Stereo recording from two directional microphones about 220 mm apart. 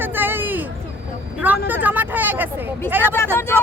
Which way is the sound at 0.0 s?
10° right (ahead or behind).